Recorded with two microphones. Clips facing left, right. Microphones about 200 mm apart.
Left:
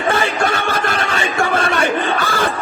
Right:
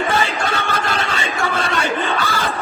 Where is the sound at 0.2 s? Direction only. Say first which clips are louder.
Left 3 dB; 50° left (ahead or behind).